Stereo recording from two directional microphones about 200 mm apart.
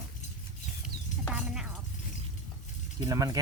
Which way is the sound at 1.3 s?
5° right (ahead or behind).